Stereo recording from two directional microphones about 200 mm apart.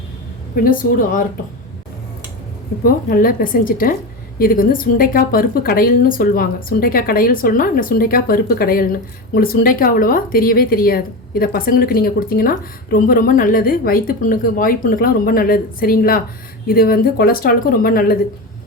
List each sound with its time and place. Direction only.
0.5 s a woman's voice: 45° left (ahead or behind)
2.8 s a woman's voice: 45° left (ahead or behind)